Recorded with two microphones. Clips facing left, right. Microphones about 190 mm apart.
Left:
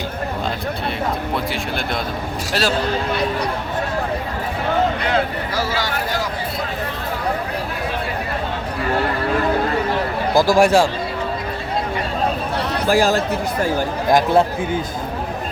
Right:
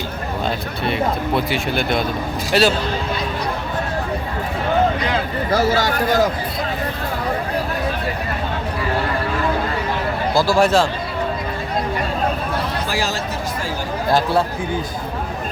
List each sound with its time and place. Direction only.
1.5 s speech: centre (ahead or behind)
5.5 s speech: 45° right (ahead or behind)
10.3 s speech: 15° left (ahead or behind)
12.9 s speech: 50° left (ahead or behind)
14.1 s speech: 15° left (ahead or behind)